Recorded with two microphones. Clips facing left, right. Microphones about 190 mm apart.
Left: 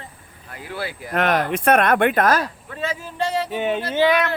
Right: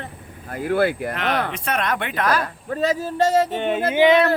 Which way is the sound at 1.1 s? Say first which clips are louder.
Left 4 dB; 50° left (ahead or behind).